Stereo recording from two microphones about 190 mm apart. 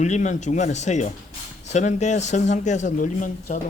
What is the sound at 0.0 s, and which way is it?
Speech, 40° left (ahead or behind).